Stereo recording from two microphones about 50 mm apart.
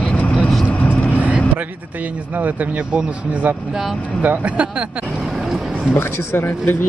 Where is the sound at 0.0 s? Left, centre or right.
Left.